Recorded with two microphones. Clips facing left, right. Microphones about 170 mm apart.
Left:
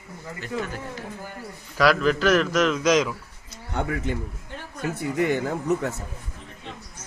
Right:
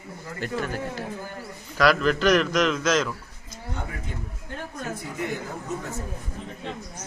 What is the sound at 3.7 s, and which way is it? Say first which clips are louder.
A man's voice: left 8 dB; 75° left (ahead or behind).